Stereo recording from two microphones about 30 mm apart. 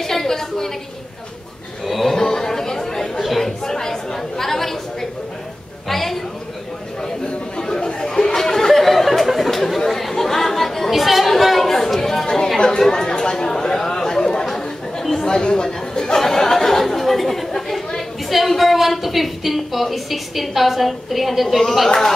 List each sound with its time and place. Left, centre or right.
0.0 s a sound: centre
1.9 s cattle: centre
2.1 s chatter: centre
3.2 s chatter: centre
3.6 s chatter: centre
5.9 s a sound: centre
7.6 s chatter: left
10.9 s music: centre
11.6 s chatter: centre
15.2 s speech: left
16.2 s chatter: centre
18.5 s a woman's voice: centre